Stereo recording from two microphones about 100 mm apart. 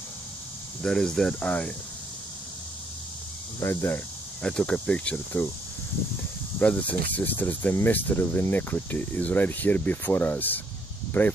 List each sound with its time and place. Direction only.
0.8 s speech: 5° left (ahead or behind)
3.5 s speech: 25° left (ahead or behind)
4.4 s speech: 10° left (ahead or behind)
6.6 s speech: 15° left (ahead or behind)